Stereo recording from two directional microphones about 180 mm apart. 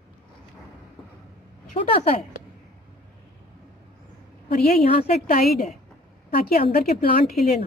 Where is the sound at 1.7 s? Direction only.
30° left (ahead or behind).